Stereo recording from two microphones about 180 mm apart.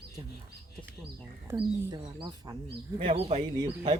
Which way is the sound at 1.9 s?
25° right (ahead or behind).